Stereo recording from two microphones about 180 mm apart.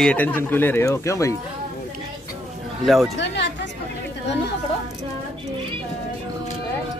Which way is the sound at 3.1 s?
75° left (ahead or behind).